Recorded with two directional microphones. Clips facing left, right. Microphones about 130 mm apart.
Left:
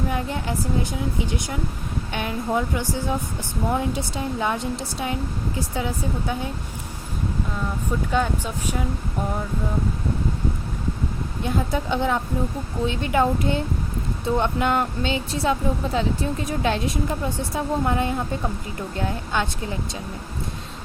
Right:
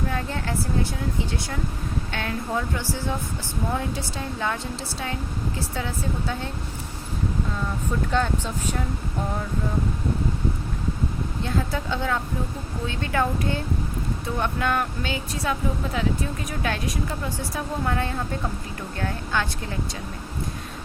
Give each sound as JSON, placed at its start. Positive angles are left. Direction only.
{"t": 0.1, "sound": "speech", "side_deg": 15}
{"t": 8.1, "sound": "speech", "side_deg": 10}
{"t": 11.4, "sound": "speech", "side_deg": 15}